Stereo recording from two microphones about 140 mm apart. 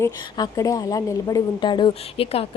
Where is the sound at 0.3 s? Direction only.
25° left (ahead or behind).